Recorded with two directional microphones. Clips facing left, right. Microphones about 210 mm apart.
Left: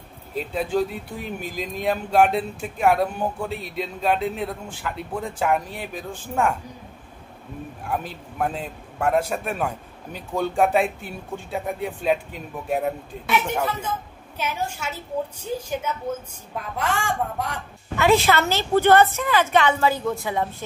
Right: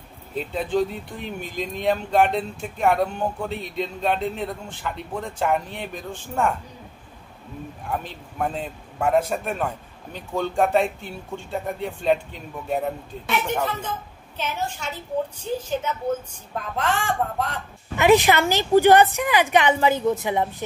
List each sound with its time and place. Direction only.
0.3 s speech: centre (ahead or behind)
7.9 s a man's voice: 5° left (ahead or behind)
17.9 s a woman's voice: 20° right (ahead or behind)